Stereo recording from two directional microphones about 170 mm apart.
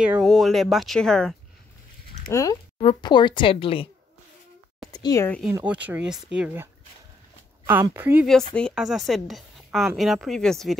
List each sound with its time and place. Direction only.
0.0 s speech: 5° right (ahead or behind)
2.3 s speech: 15° left (ahead or behind)
2.8 s speech: 30° left (ahead or behind)
4.9 s speech: 20° left (ahead or behind)
5.5 s speech: 10° right (ahead or behind)
8.5 s speech: centre (ahead or behind)